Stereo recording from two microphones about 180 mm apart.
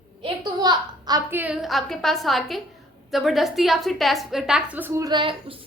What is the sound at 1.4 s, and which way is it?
A woman's voice, 5° right (ahead or behind).